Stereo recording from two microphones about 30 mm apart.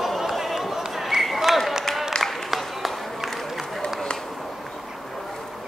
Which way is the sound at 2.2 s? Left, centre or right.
Centre.